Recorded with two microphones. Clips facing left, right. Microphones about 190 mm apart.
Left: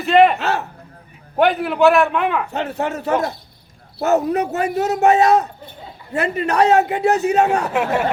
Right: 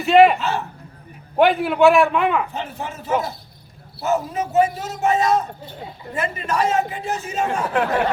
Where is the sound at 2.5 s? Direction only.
70° left (ahead or behind).